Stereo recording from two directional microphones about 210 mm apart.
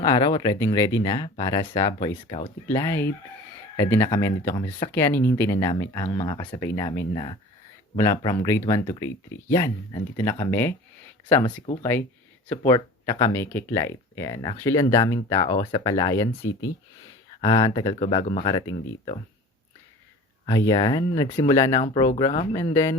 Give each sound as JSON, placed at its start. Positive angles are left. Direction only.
{"t": 0.0, "sound": "speech", "side_deg": 20}
{"t": 2.6, "sound": "speech", "side_deg": 10}
{"t": 20.4, "sound": "speech", "side_deg": 15}